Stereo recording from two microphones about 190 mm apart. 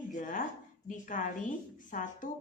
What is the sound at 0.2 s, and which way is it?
A woman's voice, 40° left (ahead or behind).